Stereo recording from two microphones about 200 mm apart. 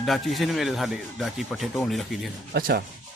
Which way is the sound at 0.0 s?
Centre (ahead or behind).